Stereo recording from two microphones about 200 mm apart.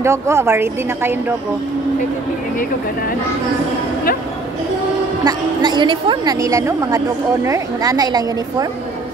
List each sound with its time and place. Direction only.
0.0 s a woman's voice: 15° right (ahead or behind)
5.2 s a woman's voice: 20° right (ahead or behind)